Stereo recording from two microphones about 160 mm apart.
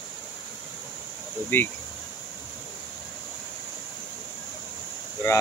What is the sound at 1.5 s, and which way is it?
Speech, 10° left (ahead or behind).